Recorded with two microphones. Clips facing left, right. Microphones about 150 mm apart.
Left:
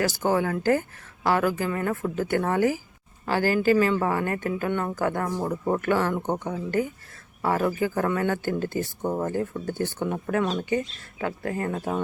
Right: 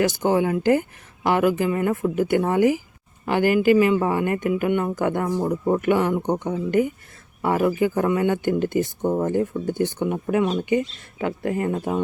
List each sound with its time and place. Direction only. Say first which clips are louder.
0.0 s speech: right 4 dB; 20° right (ahead or behind)